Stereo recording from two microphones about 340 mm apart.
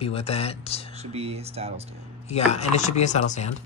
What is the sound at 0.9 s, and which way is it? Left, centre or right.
Speech, centre.